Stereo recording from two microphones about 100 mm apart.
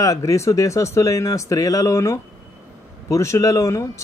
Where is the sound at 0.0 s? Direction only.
35° left (ahead or behind).